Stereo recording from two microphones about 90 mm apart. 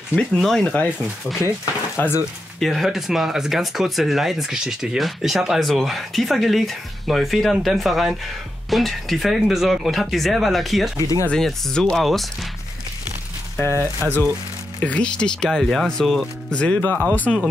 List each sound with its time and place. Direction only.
0.1 s speech: 5° left (ahead or behind)
0.8 s speech: 15° right (ahead or behind)
2.0 s speech: 25° left (ahead or behind)
2.6 s speech: centre (ahead or behind)
13.6 s speech: 25° left (ahead or behind)
14.8 s speech: 15° left (ahead or behind)